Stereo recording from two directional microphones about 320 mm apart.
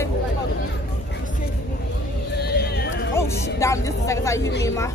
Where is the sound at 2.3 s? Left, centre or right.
Left.